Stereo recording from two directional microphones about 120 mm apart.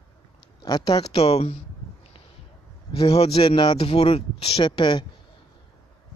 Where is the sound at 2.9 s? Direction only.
55° left (ahead or behind); by 5.1 s 40° left (ahead or behind).